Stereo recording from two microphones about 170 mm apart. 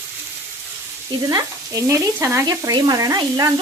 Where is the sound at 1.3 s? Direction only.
20° right (ahead or behind).